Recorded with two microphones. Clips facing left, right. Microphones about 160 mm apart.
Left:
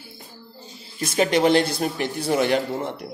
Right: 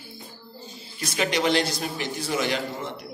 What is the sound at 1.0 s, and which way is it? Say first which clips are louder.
A man's voice: left 6 dB; 50° left (ahead or behind).